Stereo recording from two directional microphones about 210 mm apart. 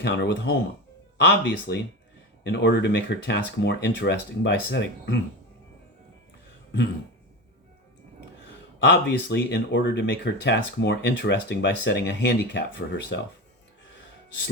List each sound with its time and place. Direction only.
0.0 s speech: 55° left (ahead or behind)
8.9 s speech: 55° left (ahead or behind)